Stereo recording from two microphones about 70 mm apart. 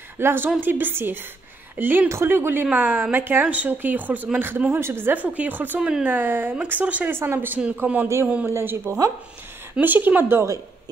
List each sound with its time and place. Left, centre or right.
0.2 s a woman's voice: right
5.8 s speech: centre
6.0 s a woman's voice: right
8.5 s a woman's voice: right